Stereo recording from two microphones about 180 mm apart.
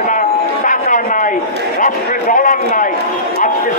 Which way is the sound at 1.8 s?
45° left (ahead or behind).